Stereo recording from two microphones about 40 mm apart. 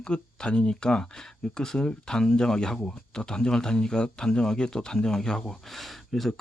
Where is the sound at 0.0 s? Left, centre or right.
Left.